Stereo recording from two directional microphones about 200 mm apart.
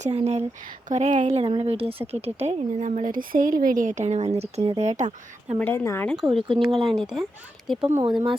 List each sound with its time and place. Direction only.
0.0 s a woman's voice: 30° right (ahead or behind)
5.5 s speech: 10° left (ahead or behind)